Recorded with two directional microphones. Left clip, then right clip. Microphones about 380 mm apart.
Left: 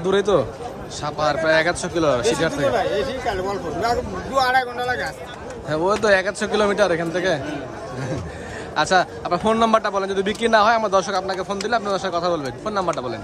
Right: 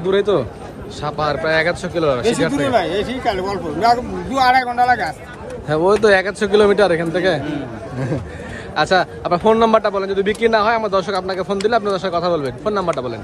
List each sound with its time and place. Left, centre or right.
0.0 s a man's voice: centre
2.7 s speech: centre
5.7 s a man's voice: centre
8.7 s a man's voice: centre